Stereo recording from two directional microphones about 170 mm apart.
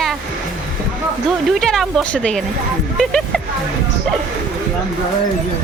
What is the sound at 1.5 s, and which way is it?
Speech, centre (ahead or behind).